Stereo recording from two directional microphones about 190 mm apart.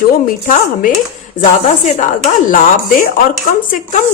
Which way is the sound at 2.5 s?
45° left (ahead or behind).